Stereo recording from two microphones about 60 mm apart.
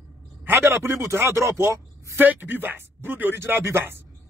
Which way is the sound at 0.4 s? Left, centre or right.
Right.